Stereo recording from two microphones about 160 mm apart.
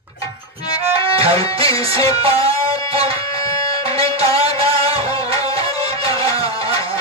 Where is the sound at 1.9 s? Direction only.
20° left (ahead or behind).